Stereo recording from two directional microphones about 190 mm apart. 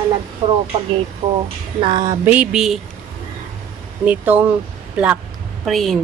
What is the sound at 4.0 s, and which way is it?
Speech, 10° right (ahead or behind).